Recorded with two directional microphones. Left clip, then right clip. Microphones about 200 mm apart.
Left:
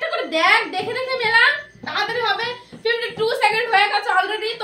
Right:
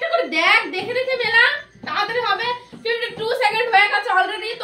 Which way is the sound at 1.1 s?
10° left (ahead or behind).